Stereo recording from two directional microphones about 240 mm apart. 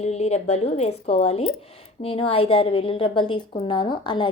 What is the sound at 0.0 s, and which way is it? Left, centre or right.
A woman's voice, left.